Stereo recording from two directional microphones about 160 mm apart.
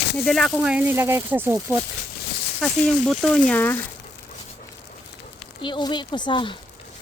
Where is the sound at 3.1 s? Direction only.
Centre (ahead or behind).